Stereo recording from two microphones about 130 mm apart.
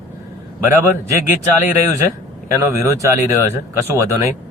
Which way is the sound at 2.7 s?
25° right (ahead or behind).